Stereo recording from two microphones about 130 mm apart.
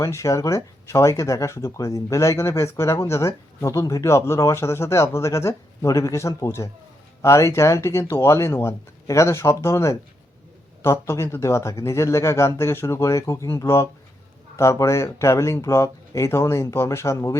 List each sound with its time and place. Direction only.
0.0 s speech: 25° left (ahead or behind)